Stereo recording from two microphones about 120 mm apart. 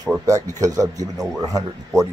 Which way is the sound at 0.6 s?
30° right (ahead or behind).